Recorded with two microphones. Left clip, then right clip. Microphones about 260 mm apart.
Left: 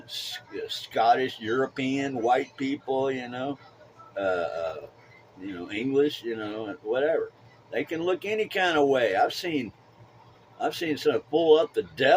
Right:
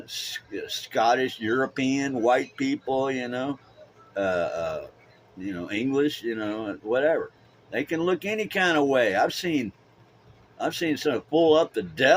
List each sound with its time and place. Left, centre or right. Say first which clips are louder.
0.0 s speech: right 2 dB; right
5.6 s speech: even; right